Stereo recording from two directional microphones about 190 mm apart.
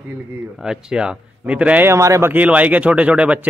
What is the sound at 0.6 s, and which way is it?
Speech, 5° right (ahead or behind).